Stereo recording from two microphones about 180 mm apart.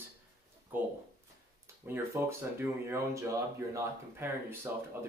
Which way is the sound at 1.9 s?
15° right (ahead or behind).